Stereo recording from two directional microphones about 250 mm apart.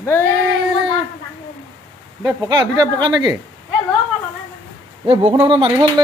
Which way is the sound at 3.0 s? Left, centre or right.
Centre.